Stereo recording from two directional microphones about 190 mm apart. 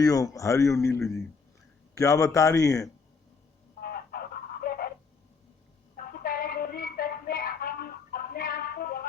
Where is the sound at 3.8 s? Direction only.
50° left (ahead or behind).